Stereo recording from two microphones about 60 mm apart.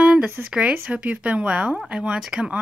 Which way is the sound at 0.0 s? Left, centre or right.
Centre.